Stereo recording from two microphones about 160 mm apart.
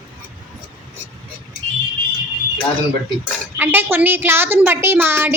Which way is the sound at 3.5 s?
15° right (ahead or behind).